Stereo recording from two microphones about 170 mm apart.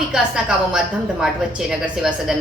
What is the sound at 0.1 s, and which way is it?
A woman's voice, 5° right (ahead or behind).